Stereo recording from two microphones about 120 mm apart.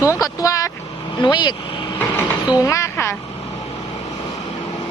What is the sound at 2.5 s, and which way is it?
Speech, 25° left (ahead or behind).